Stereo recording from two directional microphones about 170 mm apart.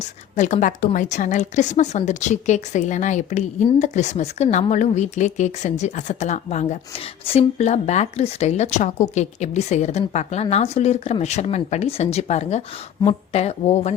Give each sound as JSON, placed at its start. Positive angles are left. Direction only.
{"t": 0.0, "sound": "speech", "side_deg": 45}